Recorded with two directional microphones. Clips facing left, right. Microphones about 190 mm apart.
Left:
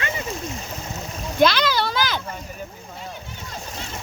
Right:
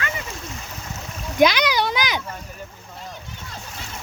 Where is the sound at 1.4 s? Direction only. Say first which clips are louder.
Right 1 dB; 15° right (ahead or behind).